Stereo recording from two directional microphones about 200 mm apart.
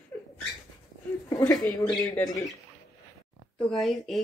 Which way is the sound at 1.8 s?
20° left (ahead or behind).